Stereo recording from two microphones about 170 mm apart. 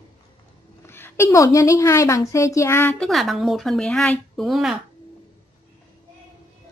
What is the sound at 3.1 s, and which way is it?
Speech, centre (ahead or behind).